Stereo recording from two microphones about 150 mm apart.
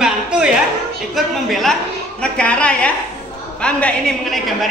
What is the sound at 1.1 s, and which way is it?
A man's voice, centre (ahead or behind).